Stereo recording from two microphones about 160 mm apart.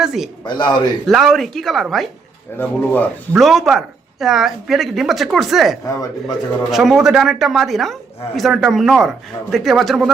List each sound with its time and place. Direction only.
0.0 s speech: centre (ahead or behind)
0.4 s speech: 30° left (ahead or behind)
1.0 s speech: centre (ahead or behind)
3.3 s speech: centre (ahead or behind)
5.8 s speech: 20° left (ahead or behind)
6.7 s speech: centre (ahead or behind)